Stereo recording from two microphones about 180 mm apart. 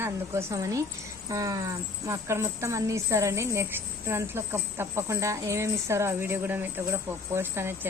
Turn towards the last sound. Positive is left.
turn(degrees=-15)  # may be behind; listen again after turning